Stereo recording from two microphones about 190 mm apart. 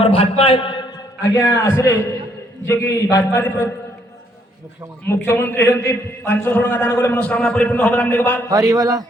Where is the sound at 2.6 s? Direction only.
15° left (ahead or behind).